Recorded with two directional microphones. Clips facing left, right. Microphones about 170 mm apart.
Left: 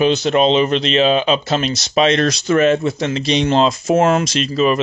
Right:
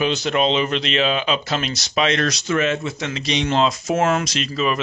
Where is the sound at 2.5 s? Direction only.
40° left (ahead or behind).